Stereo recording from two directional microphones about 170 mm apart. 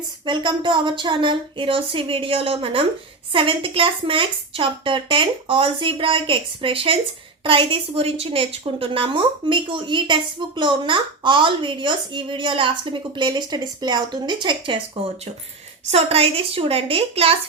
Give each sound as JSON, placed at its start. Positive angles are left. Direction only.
{"t": 0.3, "sound": "a woman's voice", "side_deg": -30}
{"t": 15.9, "sound": "speech", "side_deg": -35}